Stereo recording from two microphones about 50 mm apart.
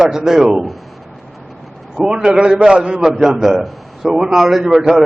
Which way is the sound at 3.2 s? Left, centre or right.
Centre.